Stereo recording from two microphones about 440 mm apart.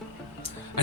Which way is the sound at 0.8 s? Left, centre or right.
Right.